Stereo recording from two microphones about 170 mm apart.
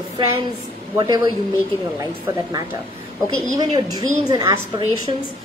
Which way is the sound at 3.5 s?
20° right (ahead or behind).